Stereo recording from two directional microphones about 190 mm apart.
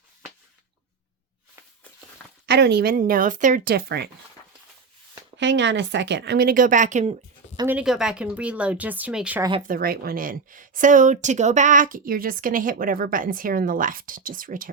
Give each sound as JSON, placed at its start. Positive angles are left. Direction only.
{"t": 2.5, "sound": "a woman's voice", "side_deg": -60}
{"t": 5.4, "sound": "speech", "side_deg": -75}
{"t": 7.7, "sound": "speech", "side_deg": -5}
{"t": 9.4, "sound": "speech", "side_deg": -25}
{"t": 9.6, "sound": "a woman's voice", "side_deg": -50}